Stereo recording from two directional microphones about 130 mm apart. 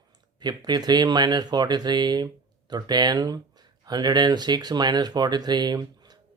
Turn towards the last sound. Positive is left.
turn(degrees=-30)  # may be behind; listen again after turning